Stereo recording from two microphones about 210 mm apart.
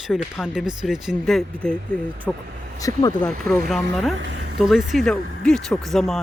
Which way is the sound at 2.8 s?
15° left (ahead or behind).